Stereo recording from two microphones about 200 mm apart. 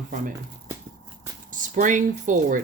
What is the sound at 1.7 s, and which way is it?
Speech, 40° right (ahead or behind).